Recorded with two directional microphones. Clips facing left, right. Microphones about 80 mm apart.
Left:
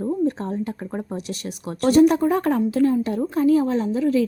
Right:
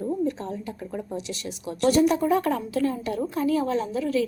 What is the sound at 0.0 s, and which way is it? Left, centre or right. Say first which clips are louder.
Speech: left 4 dB; left.